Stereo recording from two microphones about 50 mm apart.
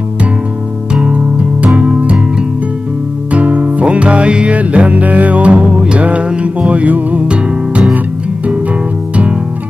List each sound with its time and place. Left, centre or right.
1.0 s music: right
3.3 s music: right
9.1 s music: right